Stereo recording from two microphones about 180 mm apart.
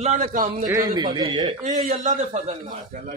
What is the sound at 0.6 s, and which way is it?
Speech, 20° right (ahead or behind).